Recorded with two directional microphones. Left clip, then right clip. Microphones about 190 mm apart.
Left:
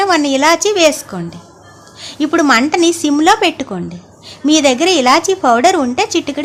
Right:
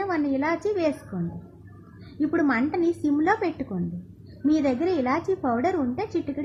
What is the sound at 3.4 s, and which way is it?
A woman's voice, 20° left (ahead or behind).